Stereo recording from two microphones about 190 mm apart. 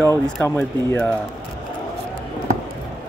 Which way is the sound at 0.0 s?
10° left (ahead or behind).